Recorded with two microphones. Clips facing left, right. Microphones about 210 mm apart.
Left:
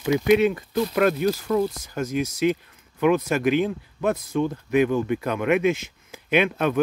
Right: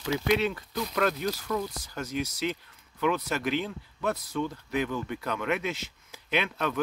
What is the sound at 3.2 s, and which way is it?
Speech, 50° left (ahead or behind).